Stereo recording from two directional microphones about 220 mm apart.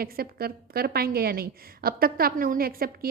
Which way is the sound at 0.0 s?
45° right (ahead or behind).